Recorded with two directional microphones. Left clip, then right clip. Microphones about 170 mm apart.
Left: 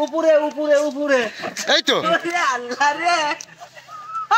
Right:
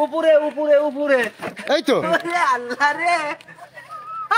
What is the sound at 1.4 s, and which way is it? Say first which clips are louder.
Speech: left 2 dB; 5° right (ahead or behind).